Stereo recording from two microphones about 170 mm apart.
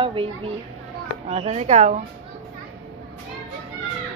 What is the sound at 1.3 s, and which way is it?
Speech, 40° right (ahead or behind).